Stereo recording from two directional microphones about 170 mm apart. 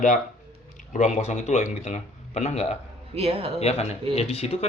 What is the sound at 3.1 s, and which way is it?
Speech, 35° right (ahead or behind).